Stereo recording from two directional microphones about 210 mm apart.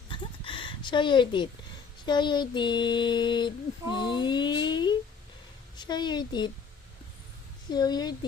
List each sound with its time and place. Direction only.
0.1 s a sound: 25° left (ahead or behind)
2.0 s child singing: 20° left (ahead or behind)
5.7 s a woman's voice: 20° left (ahead or behind)
7.7 s child singing: 20° left (ahead or behind)